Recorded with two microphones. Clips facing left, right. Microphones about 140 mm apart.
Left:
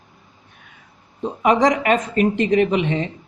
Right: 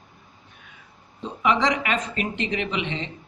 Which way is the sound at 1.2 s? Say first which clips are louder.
Left 6 dB; 45° left (ahead or behind).